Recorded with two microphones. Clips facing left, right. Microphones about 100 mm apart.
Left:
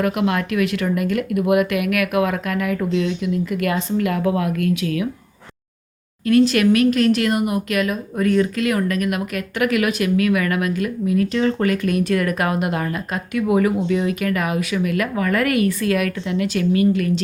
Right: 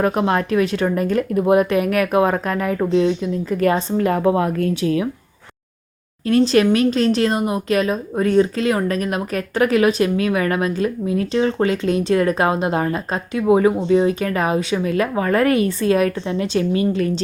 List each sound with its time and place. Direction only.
0.0 s speech: 35° right (ahead or behind)
6.2 s speech: 30° right (ahead or behind)